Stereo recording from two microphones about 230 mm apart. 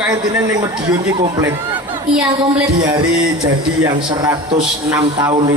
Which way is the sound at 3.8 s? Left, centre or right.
Centre.